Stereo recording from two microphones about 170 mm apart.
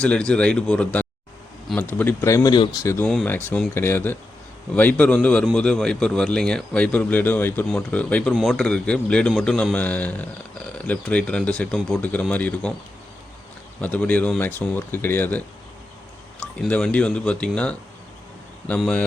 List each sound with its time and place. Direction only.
0.0 s speech: 5° left (ahead or behind)
13.8 s speech: 10° left (ahead or behind)
16.4 s speech: 10° left (ahead or behind)
18.8 s speech: 5° left (ahead or behind)